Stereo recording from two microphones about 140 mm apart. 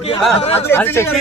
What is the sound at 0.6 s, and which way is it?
Speech, 15° left (ahead or behind).